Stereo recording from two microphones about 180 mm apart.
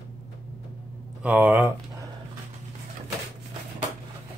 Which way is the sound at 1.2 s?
10° right (ahead or behind).